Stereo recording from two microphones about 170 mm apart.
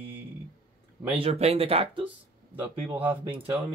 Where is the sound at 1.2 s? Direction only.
35° right (ahead or behind).